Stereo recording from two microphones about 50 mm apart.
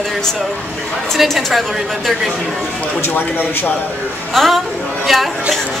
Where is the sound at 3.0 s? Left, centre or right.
Left.